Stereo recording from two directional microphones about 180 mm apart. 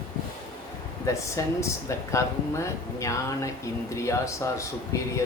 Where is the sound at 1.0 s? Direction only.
15° left (ahead or behind).